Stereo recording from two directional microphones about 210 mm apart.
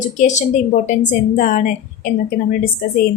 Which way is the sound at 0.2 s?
35° left (ahead or behind).